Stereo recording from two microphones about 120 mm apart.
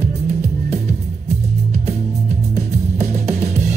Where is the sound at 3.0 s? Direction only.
65° right (ahead or behind).